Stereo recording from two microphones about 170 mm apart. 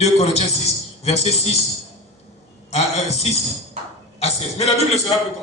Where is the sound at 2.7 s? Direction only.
40° left (ahead or behind).